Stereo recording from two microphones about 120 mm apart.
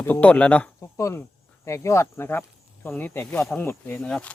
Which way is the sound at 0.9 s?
20° left (ahead or behind).